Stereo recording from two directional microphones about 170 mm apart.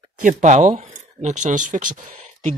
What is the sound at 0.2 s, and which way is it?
Speech, 45° right (ahead or behind).